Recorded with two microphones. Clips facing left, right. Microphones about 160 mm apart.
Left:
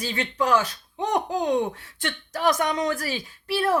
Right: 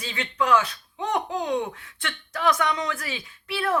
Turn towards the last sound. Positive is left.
turn(degrees=40)  # may be behind; listen again after turning